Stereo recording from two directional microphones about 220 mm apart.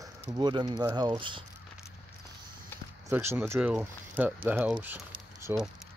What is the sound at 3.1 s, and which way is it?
Speech, 10° right (ahead or behind).